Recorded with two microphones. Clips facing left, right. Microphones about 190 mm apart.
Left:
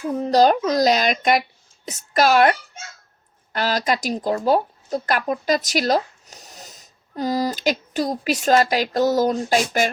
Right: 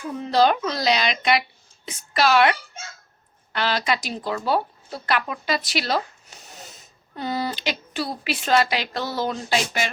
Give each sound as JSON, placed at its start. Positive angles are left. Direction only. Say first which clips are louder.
{"t": 0.2, "sound": "speech", "louder": "left 3 dB", "side_deg": 40}